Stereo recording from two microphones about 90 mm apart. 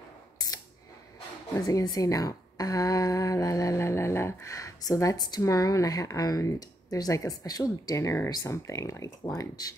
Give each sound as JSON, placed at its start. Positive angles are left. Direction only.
{"t": 1.7, "sound": "a woman's voice", "side_deg": 40}